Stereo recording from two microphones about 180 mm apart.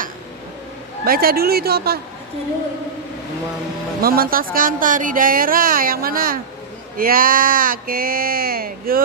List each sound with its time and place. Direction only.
1.0 s speech: 55° right (ahead or behind)
4.0 s speech: 55° right (ahead or behind)